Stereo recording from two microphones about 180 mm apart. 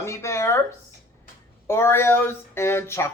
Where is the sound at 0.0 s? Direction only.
15° left (ahead or behind).